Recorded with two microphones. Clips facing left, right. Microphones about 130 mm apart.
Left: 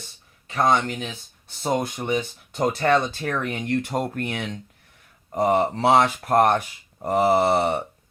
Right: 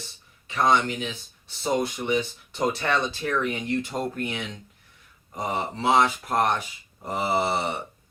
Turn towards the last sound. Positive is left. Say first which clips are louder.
# left 6 dB
turn(degrees=50)  # may be behind; listen again after turning